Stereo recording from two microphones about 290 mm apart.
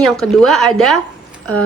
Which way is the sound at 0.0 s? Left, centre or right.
Centre.